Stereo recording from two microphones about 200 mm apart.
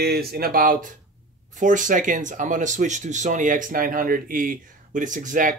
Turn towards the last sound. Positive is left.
turn(degrees=-40)  # may be behind; listen again after turning